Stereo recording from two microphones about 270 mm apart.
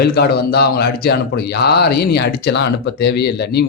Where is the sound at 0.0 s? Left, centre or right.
Left.